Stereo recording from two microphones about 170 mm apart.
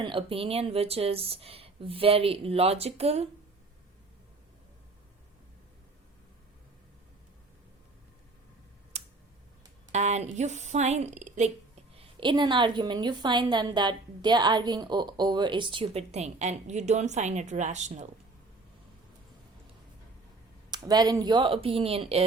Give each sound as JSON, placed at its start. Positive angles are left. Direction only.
{"t": 0.0, "sound": "speech", "side_deg": -30}
{"t": 8.9, "sound": "tick", "side_deg": -40}
{"t": 9.9, "sound": "a woman's voice", "side_deg": -40}
{"t": 11.9, "sound": "a woman's voice", "side_deg": -30}
{"t": 20.7, "sound": "a woman's voice", "side_deg": -25}